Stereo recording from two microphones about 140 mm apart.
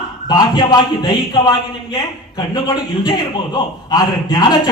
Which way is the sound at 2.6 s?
30° left (ahead or behind).